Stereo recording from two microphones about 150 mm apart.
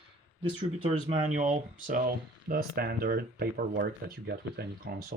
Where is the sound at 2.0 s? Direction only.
85° right.